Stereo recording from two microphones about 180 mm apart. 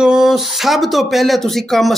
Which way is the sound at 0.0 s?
5° right (ahead or behind).